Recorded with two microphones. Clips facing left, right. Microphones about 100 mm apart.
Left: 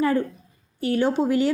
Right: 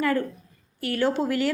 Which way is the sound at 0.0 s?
20° left (ahead or behind).